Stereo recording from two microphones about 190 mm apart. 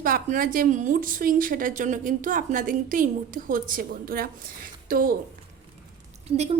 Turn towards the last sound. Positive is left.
turn(degrees=-35)  # may be behind; listen again after turning